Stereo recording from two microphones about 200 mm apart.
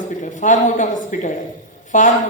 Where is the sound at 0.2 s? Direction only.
40° left (ahead or behind).